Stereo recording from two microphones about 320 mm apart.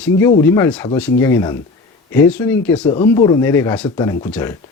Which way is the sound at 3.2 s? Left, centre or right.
Centre.